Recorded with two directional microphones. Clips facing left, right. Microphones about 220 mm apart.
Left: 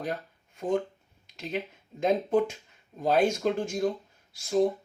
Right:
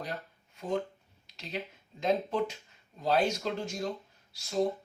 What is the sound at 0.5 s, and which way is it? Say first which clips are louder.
Speech: left 5 dB; 50° left (ahead or behind).